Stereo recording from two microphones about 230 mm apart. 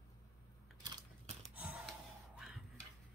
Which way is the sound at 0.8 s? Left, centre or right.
Centre.